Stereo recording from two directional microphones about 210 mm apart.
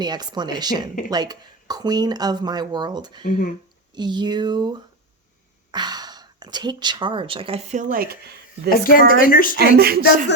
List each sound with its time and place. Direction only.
0.0 s speech: 20° right (ahead or behind)
3.2 s speech: 45° left (ahead or behind)
3.9 s speech: 20° right (ahead or behind); by 8.2 s 45° right (ahead or behind)
8.8 s speech: 40° left (ahead or behind)
9.6 s speech: 50° right (ahead or behind)